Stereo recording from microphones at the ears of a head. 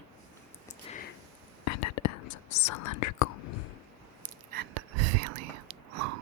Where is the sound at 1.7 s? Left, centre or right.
Left.